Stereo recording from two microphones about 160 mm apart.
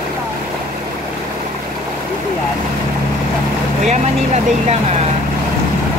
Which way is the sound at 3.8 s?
45° right (ahead or behind).